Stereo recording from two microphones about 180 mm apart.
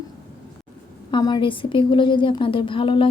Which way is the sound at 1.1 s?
25° left (ahead or behind).